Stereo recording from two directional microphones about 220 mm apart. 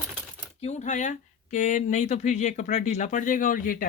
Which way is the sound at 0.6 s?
30° left (ahead or behind).